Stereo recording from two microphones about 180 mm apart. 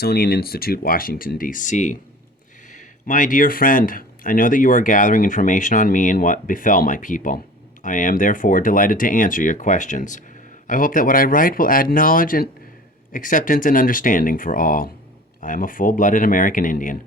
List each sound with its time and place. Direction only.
0.0 s speech: 60° left (ahead or behind)